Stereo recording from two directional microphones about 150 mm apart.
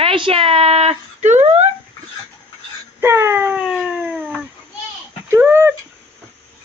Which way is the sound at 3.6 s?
5° right (ahead or behind).